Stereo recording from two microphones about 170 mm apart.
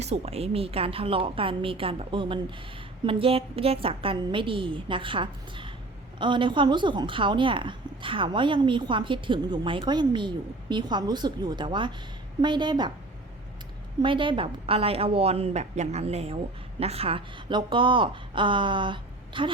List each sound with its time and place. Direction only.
0.0 s a woman's voice: 40° right (ahead or behind)
14.0 s a woman's voice: 30° right (ahead or behind)